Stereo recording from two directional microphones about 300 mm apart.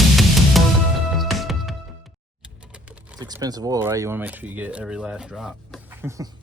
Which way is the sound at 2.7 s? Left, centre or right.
Centre.